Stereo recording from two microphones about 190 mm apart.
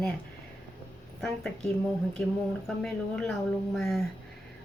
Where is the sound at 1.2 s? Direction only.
5° left (ahead or behind).